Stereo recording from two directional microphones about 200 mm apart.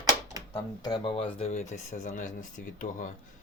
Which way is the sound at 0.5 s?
20° left (ahead or behind).